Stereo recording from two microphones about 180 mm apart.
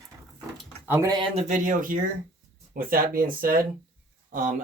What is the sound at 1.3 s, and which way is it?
Speech, 45° right (ahead or behind).